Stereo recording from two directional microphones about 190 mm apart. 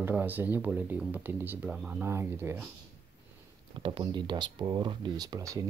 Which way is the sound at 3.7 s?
25° right (ahead or behind).